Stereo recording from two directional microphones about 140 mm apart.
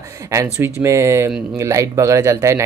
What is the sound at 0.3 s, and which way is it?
Speech, 20° right (ahead or behind).